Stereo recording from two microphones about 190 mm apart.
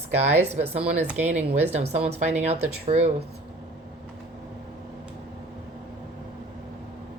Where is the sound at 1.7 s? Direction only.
35° right (ahead or behind).